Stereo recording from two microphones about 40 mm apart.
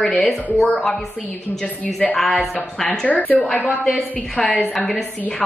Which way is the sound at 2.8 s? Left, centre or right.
Left.